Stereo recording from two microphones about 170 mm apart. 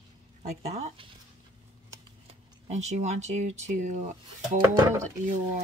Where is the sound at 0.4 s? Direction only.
40° right (ahead or behind).